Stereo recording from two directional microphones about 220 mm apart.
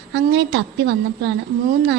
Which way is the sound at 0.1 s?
50° right (ahead or behind).